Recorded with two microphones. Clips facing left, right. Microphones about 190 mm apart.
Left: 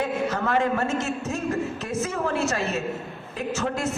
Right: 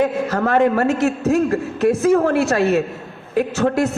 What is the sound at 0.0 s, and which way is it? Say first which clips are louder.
A man's voice: right 7 dB; 65° right (ahead or behind).